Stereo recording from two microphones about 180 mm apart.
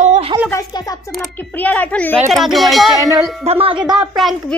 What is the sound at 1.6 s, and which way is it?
Speech, 10° left (ahead or behind).